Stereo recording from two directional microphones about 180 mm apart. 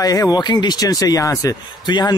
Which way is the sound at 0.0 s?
20° left (ahead or behind).